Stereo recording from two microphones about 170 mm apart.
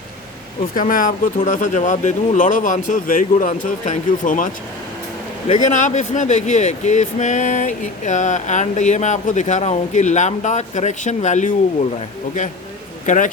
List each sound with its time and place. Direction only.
0.8 s speech: 50° left (ahead or behind)
5.6 s speech: 45° left (ahead or behind)
13.1 s speech: 50° left (ahead or behind)